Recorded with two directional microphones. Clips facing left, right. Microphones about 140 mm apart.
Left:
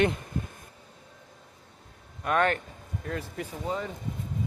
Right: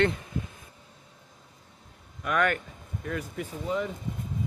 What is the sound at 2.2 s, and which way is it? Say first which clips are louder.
A man's voice: left 1 dB; 30° left (ahead or behind).